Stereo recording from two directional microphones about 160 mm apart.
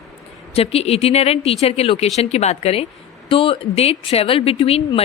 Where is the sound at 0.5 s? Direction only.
40° left (ahead or behind).